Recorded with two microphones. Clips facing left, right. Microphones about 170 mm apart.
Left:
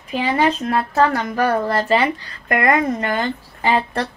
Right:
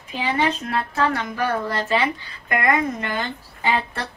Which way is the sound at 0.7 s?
40° left (ahead or behind).